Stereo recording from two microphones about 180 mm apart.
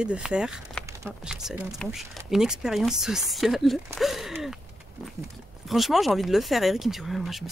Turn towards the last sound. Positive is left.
turn(degrees=0)  # may be behind; listen again after turning